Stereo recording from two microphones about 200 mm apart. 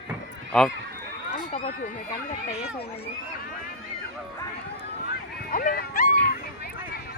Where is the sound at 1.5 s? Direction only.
35° left (ahead or behind).